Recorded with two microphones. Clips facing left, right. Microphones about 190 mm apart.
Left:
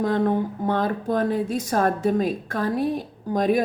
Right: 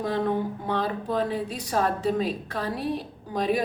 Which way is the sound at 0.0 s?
50° left (ahead or behind).